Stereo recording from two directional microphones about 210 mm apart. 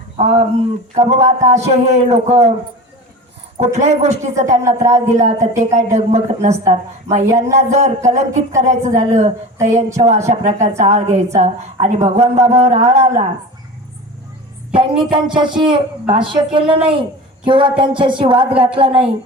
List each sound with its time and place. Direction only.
0.2 s a woman's voice: 30° right (ahead or behind)
3.6 s a woman's voice: 35° right (ahead or behind)
4.6 s speech: 15° right (ahead or behind)
5.1 s a woman's voice: 35° right (ahead or behind)
14.7 s a woman's voice: 25° right (ahead or behind)